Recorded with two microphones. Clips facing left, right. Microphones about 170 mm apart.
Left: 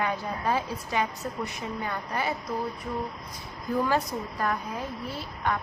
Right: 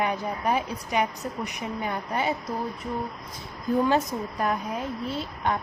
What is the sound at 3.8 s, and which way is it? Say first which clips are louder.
A woman's voice: right 3 dB; 20° right (ahead or behind).